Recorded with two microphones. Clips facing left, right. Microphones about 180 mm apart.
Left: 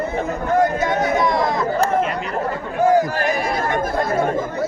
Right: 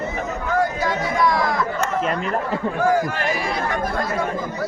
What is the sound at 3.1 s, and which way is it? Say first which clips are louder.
Speech: left 3 dB; 40° left (ahead or behind).